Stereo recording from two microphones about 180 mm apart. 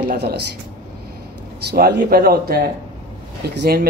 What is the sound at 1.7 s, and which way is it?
Speech, 65° right (ahead or behind).